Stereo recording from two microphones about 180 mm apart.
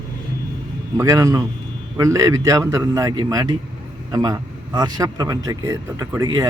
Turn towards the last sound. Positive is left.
turn(degrees=-20)  # may be behind; listen again after turning